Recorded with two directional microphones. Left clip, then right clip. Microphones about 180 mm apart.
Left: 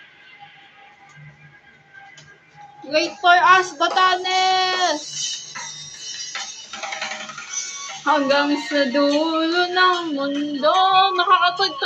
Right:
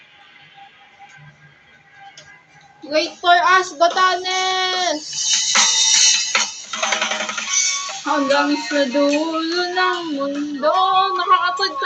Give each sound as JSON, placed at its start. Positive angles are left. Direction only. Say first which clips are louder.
{"t": 2.9, "sound": "a child's voice", "louder": "even", "side_deg": -5}
{"t": 5.3, "sound": "music", "louder": "right 16 dB", "side_deg": -45}
{"t": 9.4, "sound": "female singing", "louder": "left 2 dB", "side_deg": -10}
{"t": 9.9, "sound": "a sound", "louder": "even", "side_deg": -25}
{"t": 10.6, "sound": "female singing", "louder": "even", "side_deg": -5}